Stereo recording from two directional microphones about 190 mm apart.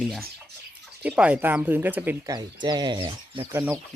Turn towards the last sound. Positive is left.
turn(degrees=-10)  # may be behind; listen again after turning